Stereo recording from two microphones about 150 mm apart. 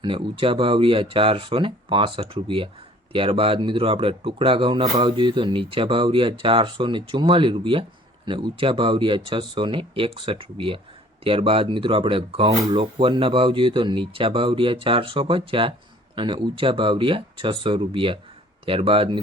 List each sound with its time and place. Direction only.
0.0 s speech: 35° right (ahead or behind)